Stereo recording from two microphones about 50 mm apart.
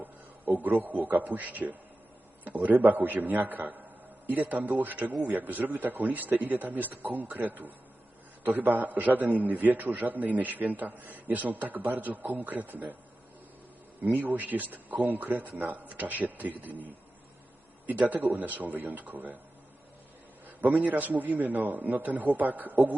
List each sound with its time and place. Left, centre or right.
0.0 s a man's voice: right
14.0 s a man's voice: right
17.8 s a man's voice: right
20.8 s a man's voice: right